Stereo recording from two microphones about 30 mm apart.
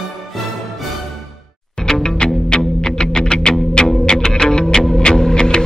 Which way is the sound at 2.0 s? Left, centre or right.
Left.